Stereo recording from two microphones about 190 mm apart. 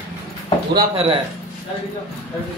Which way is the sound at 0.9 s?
30° right (ahead or behind).